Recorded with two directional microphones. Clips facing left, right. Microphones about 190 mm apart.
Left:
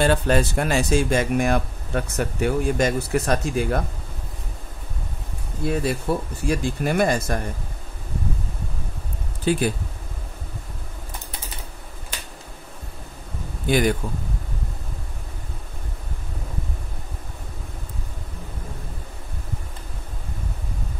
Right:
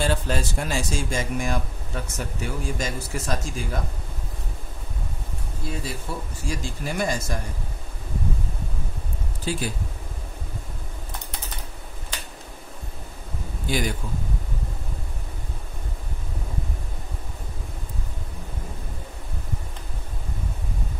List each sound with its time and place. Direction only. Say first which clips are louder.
0.0 s speech: left 6 dB; 60° left (ahead or behind)
5.7 s speech: left 9 dB; 60° left (ahead or behind)
9.4 s speech: left 7 dB; 60° left (ahead or behind)
13.7 s speech: left 7 dB; 55° left (ahead or behind)